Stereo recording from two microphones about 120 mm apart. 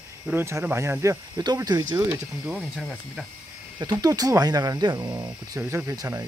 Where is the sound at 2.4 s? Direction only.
10° right (ahead or behind).